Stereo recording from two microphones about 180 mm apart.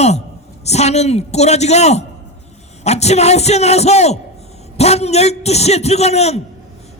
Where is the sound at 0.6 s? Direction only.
35° left (ahead or behind).